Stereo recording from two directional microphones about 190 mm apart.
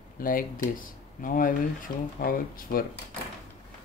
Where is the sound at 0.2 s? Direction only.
45° left (ahead or behind).